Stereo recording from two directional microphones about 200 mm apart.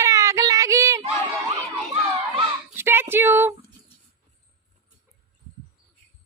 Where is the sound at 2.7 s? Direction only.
10° right (ahead or behind).